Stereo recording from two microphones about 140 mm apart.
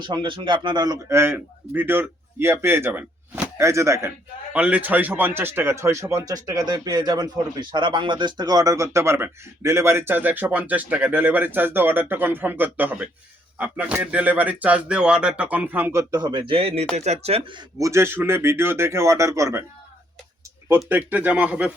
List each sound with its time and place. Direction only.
0.0 s speech: 35° right (ahead or behind)
1.1 s a man's voice: 15° right (ahead or behind)
4.5 s speech: 10° right (ahead or behind)
16.2 s speech: 35° right (ahead or behind)
17.7 s speech: 20° right (ahead or behind)
20.7 s speech: 15° right (ahead or behind)